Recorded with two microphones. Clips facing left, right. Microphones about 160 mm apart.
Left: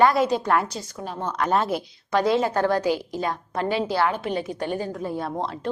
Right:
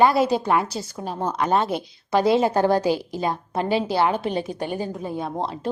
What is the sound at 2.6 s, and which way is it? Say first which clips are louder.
A woman's voice: right 2 dB; 30° right (ahead or behind).